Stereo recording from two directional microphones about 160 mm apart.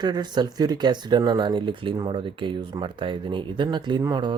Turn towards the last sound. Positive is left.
turn(degrees=-25)  # may be behind; listen again after turning